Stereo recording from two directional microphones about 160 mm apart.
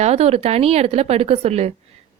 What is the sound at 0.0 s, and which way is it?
A woman's voice, 40° right (ahead or behind).